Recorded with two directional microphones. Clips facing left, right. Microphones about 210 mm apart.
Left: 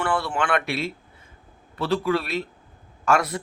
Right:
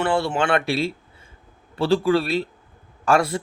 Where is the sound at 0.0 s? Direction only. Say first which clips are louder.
Right 4 dB; 25° right (ahead or behind).